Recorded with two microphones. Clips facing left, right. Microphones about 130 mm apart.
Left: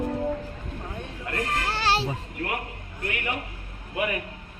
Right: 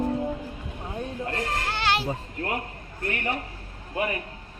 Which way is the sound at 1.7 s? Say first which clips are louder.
Left 1 dB; 35° left (ahead or behind).